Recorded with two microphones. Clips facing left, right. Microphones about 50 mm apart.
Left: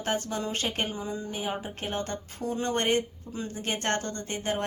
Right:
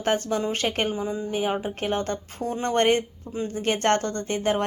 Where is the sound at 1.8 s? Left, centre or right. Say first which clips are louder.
Right 6 dB; right.